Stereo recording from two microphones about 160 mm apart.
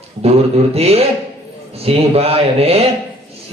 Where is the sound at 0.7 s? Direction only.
40° right (ahead or behind).